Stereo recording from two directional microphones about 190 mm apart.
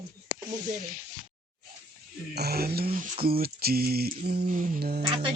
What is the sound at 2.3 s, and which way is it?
Speech, 55° right (ahead or behind).